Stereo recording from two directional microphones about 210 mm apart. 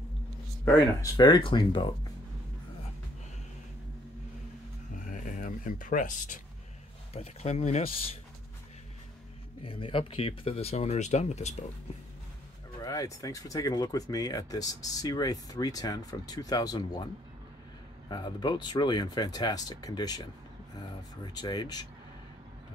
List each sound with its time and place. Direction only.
0.7 s speech: 15° left (ahead or behind)
4.9 s a sound: 40° left (ahead or behind)
7.2 s speech: 30° left (ahead or behind)
9.6 s speech: 25° left (ahead or behind)
12.8 s speech: 15° left (ahead or behind)
18.1 s speech: 20° left (ahead or behind)